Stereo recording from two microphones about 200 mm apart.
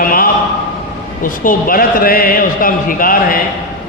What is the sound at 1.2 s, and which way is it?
A man's voice, 45° left (ahead or behind).